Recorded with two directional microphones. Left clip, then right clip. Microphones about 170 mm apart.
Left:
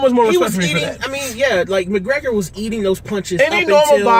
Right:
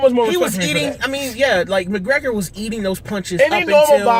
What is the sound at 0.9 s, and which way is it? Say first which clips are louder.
Speech: right 1 dB; 25° right (ahead or behind).